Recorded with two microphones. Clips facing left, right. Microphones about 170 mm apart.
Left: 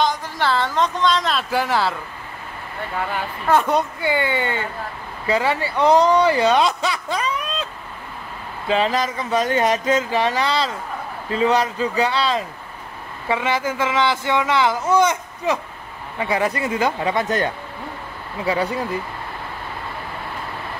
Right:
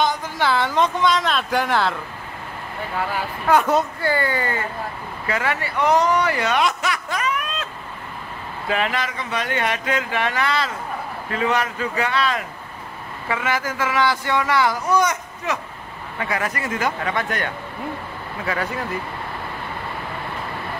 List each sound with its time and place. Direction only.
0.0 s speech: centre (ahead or behind)
3.0 s speech: centre (ahead or behind)
4.1 s speech: 25° left (ahead or behind)
8.6 s speech: 30° left (ahead or behind)